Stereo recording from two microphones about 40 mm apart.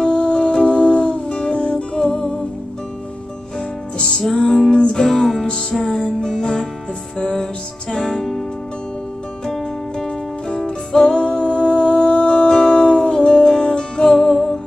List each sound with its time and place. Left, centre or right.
0.0 s music: left
3.5 s music: centre
9.5 s music: centre
11.0 s music: left
14.1 s music: centre